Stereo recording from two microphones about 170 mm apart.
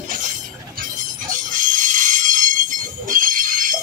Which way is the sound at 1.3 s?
50° right (ahead or behind).